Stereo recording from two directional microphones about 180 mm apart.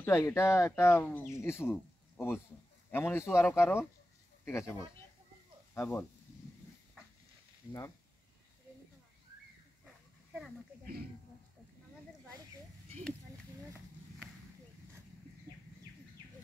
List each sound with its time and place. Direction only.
0.0 s speech: 15° left (ahead or behind)
5.8 s speech: 15° left (ahead or behind)